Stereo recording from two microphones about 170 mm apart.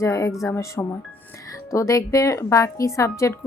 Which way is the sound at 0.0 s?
20° left (ahead or behind).